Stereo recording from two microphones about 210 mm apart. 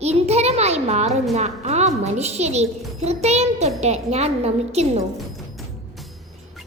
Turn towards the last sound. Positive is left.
turn(degrees=-30)  # may be behind; listen again after turning